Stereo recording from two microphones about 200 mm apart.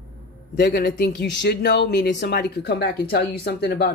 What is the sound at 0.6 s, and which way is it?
Speech, 55° left (ahead or behind).